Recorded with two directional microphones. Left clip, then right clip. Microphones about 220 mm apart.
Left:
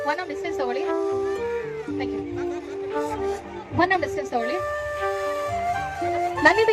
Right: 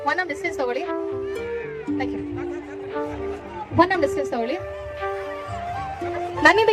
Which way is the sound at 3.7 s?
50° right (ahead or behind).